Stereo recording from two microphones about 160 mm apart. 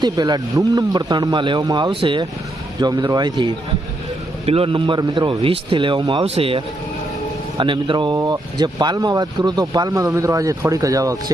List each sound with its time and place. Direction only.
0.0 s a man's voice: 25° right (ahead or behind)
7.6 s speech: 30° right (ahead or behind)